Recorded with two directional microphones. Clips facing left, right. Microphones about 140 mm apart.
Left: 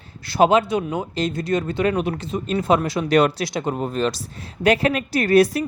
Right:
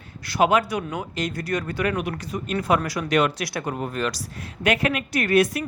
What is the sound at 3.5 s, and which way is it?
A woman's voice, 25° left (ahead or behind).